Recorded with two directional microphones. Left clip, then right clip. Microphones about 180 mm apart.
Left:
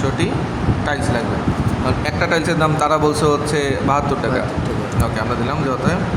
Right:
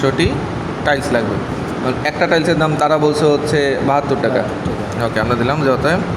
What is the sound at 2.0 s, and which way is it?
A man's voice, 20° right (ahead or behind).